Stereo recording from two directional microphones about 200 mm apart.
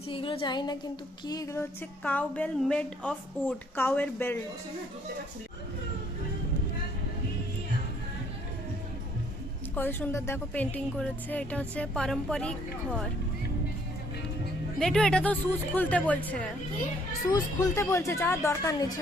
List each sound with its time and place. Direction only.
0.1 s speech: 25° left (ahead or behind)
2.0 s speech: 5° left (ahead or behind)
9.7 s speech: 10° left (ahead or behind)
14.8 s speech: 5° left (ahead or behind)
17.2 s speech: 20° left (ahead or behind)